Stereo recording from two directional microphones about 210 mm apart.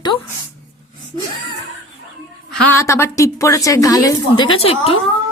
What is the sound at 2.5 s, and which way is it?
A woman's voice, 10° left (ahead or behind).